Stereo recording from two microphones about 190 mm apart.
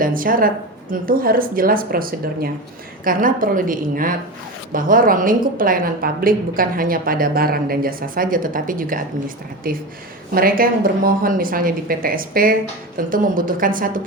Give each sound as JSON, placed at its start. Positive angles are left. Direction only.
{"t": 0.0, "sound": "a woman's voice", "side_deg": -45}